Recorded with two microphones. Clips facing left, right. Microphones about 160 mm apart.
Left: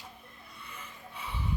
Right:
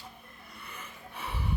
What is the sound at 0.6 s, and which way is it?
Snort, 65° right (ahead or behind).